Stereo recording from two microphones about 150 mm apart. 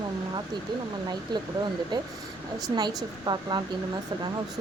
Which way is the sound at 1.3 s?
30° right (ahead or behind).